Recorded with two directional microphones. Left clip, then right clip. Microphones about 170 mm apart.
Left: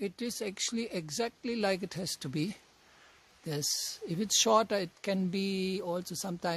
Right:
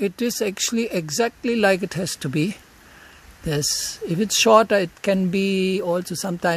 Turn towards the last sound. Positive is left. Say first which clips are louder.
# right 12 dB
turn(degrees=-10)  # may be behind; listen again after turning